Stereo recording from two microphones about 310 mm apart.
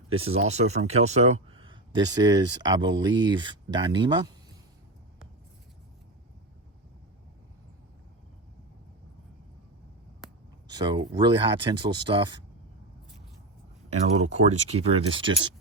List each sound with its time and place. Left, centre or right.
0.1 s speech: centre
10.7 s speech: centre
14.2 s speech: right